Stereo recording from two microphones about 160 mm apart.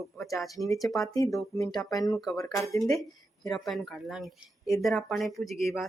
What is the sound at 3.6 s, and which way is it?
Speech, centre (ahead or behind).